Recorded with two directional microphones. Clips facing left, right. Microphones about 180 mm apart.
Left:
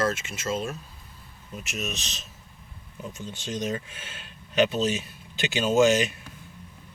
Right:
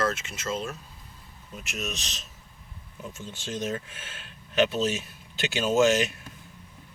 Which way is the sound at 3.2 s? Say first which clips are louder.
Left 1 dB; centre (ahead or behind).